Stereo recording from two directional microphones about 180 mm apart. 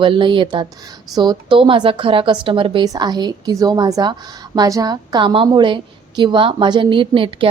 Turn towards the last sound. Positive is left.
turn(degrees=-30)  # may be behind; listen again after turning